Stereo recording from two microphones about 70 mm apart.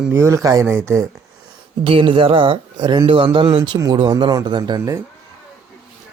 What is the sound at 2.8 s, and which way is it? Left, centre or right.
Speech, right.